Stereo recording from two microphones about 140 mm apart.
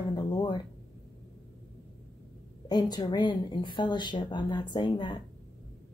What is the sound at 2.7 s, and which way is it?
A woman's voice, 30° left (ahead or behind).